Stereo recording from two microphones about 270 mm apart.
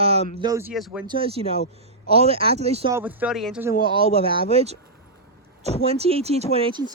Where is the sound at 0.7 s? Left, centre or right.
Centre.